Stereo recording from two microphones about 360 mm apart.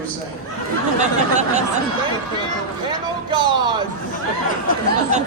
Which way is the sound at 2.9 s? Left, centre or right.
Centre.